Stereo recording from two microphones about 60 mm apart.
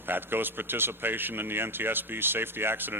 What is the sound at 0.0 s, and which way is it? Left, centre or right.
Speech, right.